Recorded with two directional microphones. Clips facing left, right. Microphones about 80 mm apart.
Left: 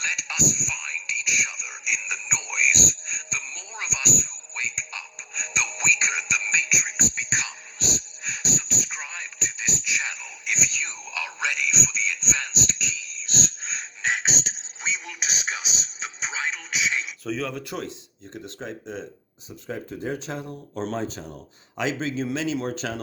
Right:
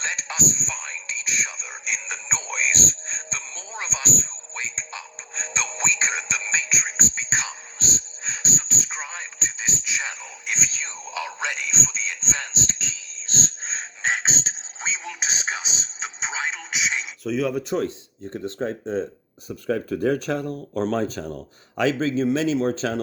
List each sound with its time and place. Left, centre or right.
0.0 s speech: right
17.2 s speech: centre
17.7 s a man's voice: centre
18.3 s speech: right
19.5 s speech: right